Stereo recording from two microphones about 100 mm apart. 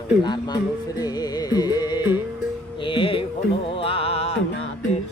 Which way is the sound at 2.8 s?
60° left (ahead or behind).